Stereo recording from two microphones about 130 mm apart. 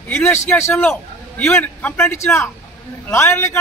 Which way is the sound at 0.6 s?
20° left (ahead or behind).